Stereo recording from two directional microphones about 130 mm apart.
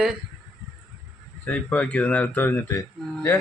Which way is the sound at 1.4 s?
10° left (ahead or behind).